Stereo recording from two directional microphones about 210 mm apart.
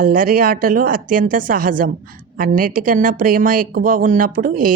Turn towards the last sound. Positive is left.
turn(degrees=-40)  # may be behind; listen again after turning